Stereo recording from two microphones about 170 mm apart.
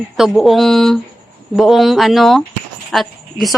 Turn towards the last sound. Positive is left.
turn(degrees=0)  # may be behind; listen again after turning